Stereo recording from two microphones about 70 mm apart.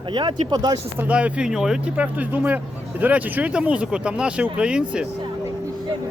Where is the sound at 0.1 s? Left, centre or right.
Right.